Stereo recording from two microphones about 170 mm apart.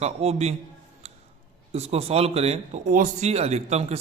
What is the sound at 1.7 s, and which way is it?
A man's voice, 40° right (ahead or behind).